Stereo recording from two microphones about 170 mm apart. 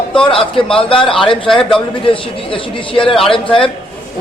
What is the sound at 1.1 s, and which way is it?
Speech, centre (ahead or behind).